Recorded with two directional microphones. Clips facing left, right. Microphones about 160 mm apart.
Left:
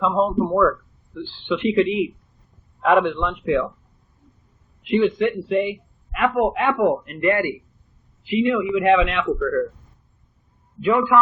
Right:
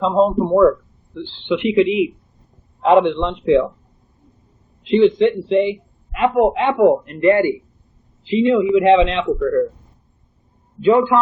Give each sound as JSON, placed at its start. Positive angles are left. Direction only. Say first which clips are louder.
{"t": 0.0, "sound": "a man's voice", "louder": "right 4 dB", "side_deg": -25}
{"t": 4.8, "sound": "a man's voice", "louder": "right 6 dB", "side_deg": -25}
{"t": 10.8, "sound": "a man's voice", "louder": "right 5 dB", "side_deg": -25}